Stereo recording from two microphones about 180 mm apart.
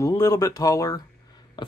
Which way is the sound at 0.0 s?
20° left (ahead or behind).